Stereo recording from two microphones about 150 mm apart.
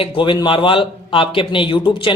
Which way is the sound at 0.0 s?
35° left (ahead or behind).